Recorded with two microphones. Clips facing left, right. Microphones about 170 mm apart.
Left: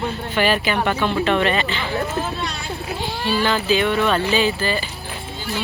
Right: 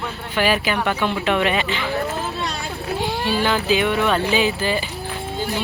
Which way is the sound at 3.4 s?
15° right (ahead or behind).